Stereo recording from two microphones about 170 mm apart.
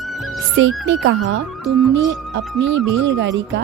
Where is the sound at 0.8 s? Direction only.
90° right.